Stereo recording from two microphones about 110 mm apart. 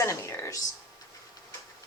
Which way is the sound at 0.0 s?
25° left (ahead or behind).